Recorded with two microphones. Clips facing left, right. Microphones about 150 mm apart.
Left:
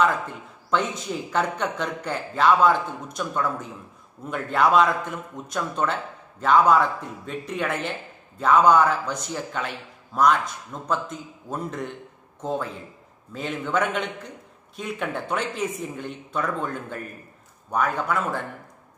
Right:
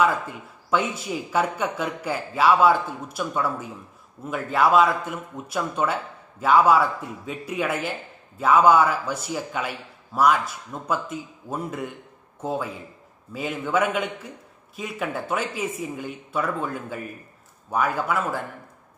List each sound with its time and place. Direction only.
0.0 s a man's voice: 5° right (ahead or behind)